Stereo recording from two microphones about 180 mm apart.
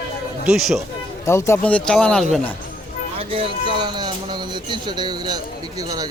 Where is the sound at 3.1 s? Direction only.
30° right (ahead or behind).